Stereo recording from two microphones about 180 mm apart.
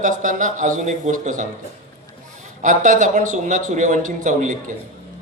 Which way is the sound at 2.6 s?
45° right (ahead or behind).